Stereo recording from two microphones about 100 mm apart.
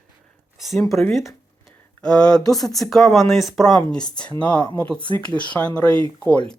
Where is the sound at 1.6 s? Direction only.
10° left (ahead or behind).